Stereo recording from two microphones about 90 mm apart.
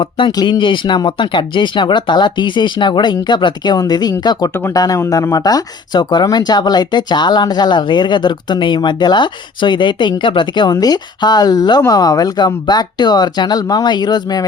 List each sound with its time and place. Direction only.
0.3 s speech: 45° left (ahead or behind)